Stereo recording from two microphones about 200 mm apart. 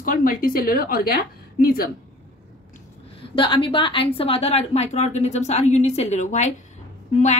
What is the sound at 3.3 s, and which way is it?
A woman's voice, 25° left (ahead or behind).